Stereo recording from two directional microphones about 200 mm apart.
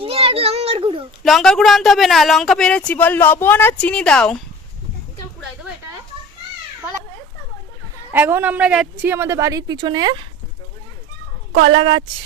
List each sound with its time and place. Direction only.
0.0 s a sound: 30° right (ahead or behind)
1.2 s speech: centre (ahead or behind)
8.1 s a woman's voice: 10° right (ahead or behind)
11.6 s speech: 25° right (ahead or behind)